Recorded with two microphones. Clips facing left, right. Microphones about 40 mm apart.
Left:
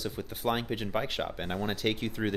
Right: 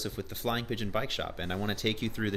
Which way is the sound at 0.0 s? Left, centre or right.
Centre.